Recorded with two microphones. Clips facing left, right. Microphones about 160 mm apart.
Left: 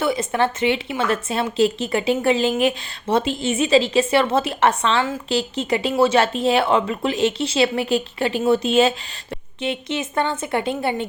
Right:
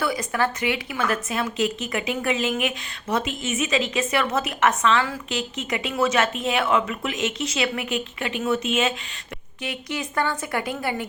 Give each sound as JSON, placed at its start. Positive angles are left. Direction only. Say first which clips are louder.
{"t": 0.0, "sound": "a woman's voice", "louder": "left 4 dB", "side_deg": 25}